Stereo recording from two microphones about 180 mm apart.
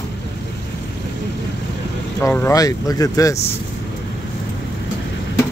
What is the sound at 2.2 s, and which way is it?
Speech, 15° left (ahead or behind).